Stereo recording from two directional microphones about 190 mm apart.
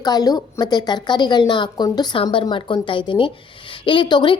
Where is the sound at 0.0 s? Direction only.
20° left (ahead or behind).